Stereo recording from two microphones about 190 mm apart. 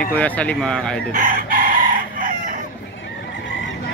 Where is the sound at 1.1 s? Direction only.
45° right (ahead or behind).